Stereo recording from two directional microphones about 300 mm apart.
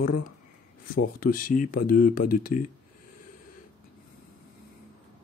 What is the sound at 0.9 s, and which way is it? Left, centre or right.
Speech, left.